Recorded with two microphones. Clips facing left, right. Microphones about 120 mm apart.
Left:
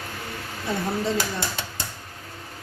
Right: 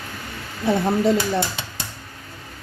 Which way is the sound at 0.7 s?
60° right (ahead or behind).